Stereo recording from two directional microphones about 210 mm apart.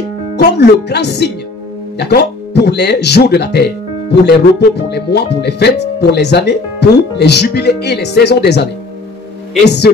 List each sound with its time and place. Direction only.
0.4 s speech: 50° left (ahead or behind)
9.7 s speech: 50° left (ahead or behind)